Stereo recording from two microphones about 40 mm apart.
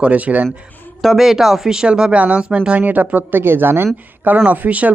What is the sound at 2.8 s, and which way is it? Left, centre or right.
Speech, right.